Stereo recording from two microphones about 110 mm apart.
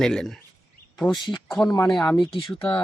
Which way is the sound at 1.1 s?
40° left (ahead or behind).